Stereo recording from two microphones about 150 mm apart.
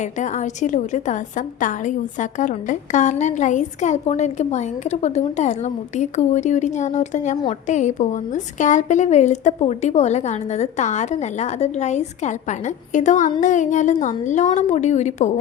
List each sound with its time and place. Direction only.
0.0 s a woman's voice: 55° left (ahead or behind)